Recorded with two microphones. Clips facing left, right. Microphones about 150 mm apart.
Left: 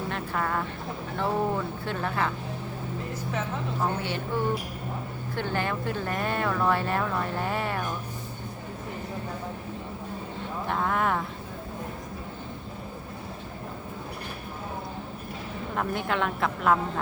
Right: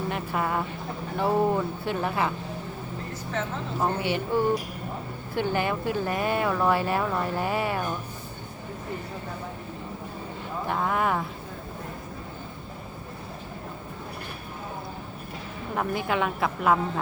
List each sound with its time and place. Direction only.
0.1 s vehicle: 15° right (ahead or behind)
1.2 s speech: 10° right (ahead or behind)
3.8 s speech: 15° right (ahead or behind)
5.3 s speech: 10° right (ahead or behind)
10.7 s a woman's voice: 5° right (ahead or behind)
15.7 s a woman's voice: 5° right (ahead or behind)